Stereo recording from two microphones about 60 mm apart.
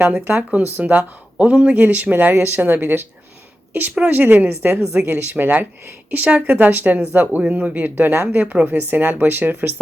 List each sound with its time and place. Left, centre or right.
0.0 s speech: right
4.8 s speech: centre
5.0 s speech: right